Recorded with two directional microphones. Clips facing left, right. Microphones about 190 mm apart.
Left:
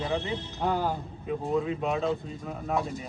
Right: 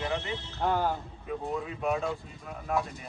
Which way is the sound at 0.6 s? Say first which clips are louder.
Even; 15° left (ahead or behind).